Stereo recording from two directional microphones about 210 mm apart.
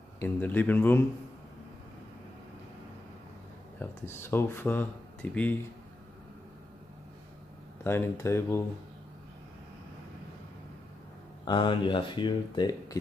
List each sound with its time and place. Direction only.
0.2 s speech: 10° left (ahead or behind)
3.8 s speech: 10° left (ahead or behind)
7.8 s speech: 10° left (ahead or behind)
11.4 s speech: 25° left (ahead or behind)